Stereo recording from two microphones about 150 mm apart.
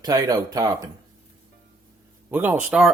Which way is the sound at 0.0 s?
25° right (ahead or behind).